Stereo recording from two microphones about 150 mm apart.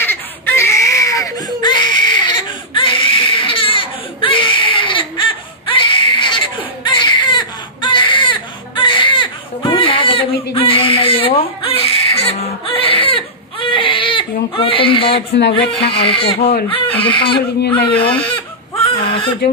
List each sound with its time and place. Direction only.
0.0 s baby cry: 15° left (ahead or behind); by 15.1 s 35° left (ahead or behind)
15.5 s speech: 35° left (ahead or behind)
17.8 s baby cry: 35° left (ahead or behind)